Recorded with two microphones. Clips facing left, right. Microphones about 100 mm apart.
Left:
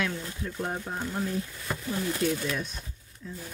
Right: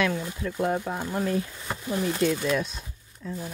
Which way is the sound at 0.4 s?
80° right.